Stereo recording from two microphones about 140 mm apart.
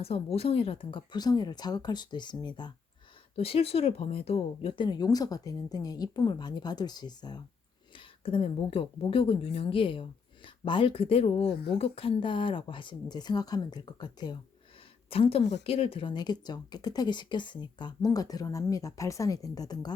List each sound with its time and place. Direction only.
0.0 s speech: 45° left (ahead or behind)
3.3 s a woman's voice: 45° left (ahead or behind)
15.1 s speech: 45° left (ahead or behind); by 19.9 s 25° left (ahead or behind)